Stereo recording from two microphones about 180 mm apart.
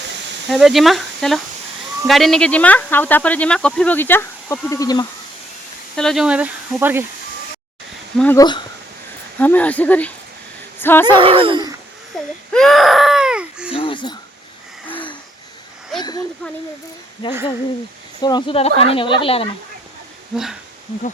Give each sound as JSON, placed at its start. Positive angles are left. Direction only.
{"t": 0.5, "sound": "speech", "side_deg": 0}
{"t": 6.0, "sound": "speech", "side_deg": 0}
{"t": 8.4, "sound": "speech", "side_deg": 25}
{"t": 9.4, "sound": "speech", "side_deg": 10}
{"t": 11.0, "sound": "speech", "side_deg": -30}
{"t": 12.1, "sound": "speech", "side_deg": 0}
{"t": 12.5, "sound": "a sound", "side_deg": 0}
{"t": 13.7, "sound": "a sound", "side_deg": 30}
{"t": 16.0, "sound": "speech", "side_deg": 25}
{"t": 17.2, "sound": "speech", "side_deg": 30}
{"t": 20.3, "sound": "speech", "side_deg": 0}